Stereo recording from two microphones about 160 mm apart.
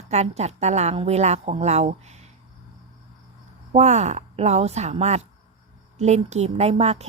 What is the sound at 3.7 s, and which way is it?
A woman's voice, 45° right (ahead or behind).